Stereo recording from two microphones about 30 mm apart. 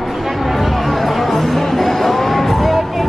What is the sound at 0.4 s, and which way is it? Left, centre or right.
Music, centre.